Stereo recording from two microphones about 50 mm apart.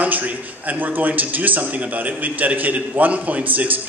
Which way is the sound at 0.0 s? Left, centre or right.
Right.